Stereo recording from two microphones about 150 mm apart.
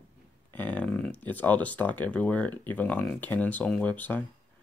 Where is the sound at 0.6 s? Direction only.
10° left (ahead or behind).